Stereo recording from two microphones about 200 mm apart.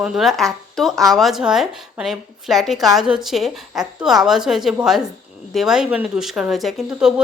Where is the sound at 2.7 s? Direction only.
20° right (ahead or behind).